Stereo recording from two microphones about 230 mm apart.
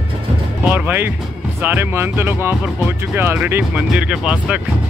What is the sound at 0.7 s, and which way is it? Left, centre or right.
Music, centre.